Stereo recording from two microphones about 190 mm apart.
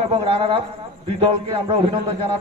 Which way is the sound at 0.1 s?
25° right (ahead or behind).